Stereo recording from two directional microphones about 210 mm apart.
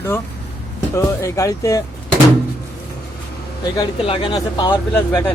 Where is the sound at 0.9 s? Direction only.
15° left (ahead or behind).